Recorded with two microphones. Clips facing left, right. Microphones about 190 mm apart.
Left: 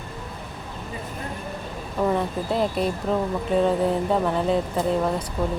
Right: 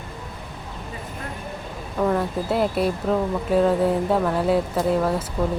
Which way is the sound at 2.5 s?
5° right (ahead or behind).